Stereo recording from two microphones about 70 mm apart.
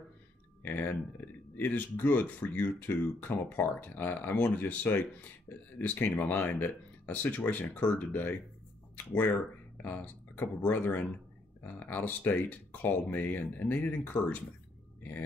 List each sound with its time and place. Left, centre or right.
0.6 s speech: left